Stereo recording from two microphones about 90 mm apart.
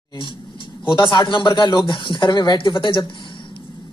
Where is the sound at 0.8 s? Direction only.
65° left (ahead or behind).